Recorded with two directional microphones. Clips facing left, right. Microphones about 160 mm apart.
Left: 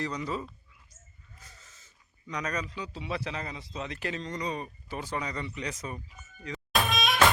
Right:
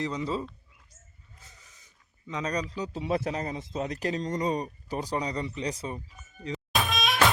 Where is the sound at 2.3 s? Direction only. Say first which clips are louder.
Right 3 dB; 30° right (ahead or behind).